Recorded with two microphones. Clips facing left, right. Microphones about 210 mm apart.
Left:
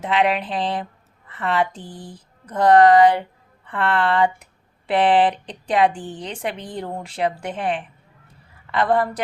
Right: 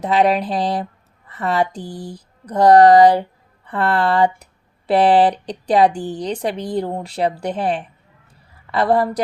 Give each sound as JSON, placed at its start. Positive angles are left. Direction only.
{"t": 0.0, "sound": "speech", "side_deg": -40}